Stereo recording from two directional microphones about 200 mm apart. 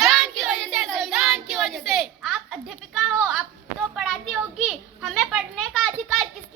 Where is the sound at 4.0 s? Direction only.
Centre (ahead or behind).